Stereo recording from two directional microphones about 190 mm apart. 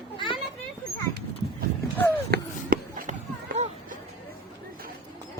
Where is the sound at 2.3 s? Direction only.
50° right (ahead or behind).